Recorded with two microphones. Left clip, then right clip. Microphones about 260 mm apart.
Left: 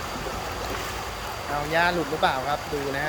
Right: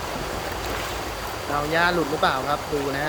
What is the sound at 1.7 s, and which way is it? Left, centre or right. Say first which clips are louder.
Speech: right 1 dB; centre.